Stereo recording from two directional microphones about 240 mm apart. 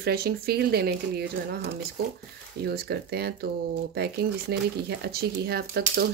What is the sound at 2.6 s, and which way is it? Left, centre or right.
Speech, right.